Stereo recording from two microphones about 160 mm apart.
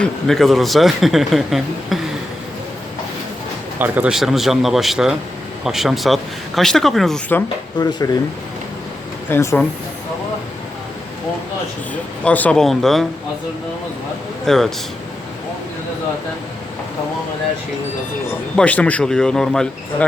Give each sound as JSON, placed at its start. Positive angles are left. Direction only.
{"t": 0.0, "sound": "a man's voice", "side_deg": 0}
{"t": 3.8, "sound": "a man's voice", "side_deg": -10}
{"t": 7.3, "sound": "speech", "side_deg": 15}
{"t": 7.9, "sound": "speech", "side_deg": 25}
{"t": 9.3, "sound": "speech", "side_deg": 20}
{"t": 12.2, "sound": "a man's voice", "side_deg": 10}
{"t": 14.4, "sound": "a man's voice", "side_deg": 0}
{"t": 18.5, "sound": "a man's voice", "side_deg": 10}